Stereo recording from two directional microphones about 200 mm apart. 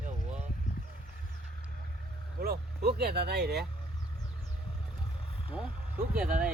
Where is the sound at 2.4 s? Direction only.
50° right (ahead or behind).